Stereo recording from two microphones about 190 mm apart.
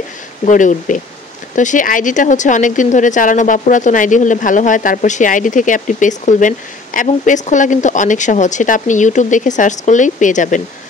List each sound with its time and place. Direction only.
0.5 s speech: 40° left (ahead or behind)